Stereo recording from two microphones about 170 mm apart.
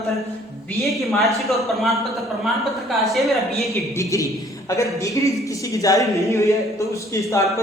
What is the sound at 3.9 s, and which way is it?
A man's voice, 20° left (ahead or behind).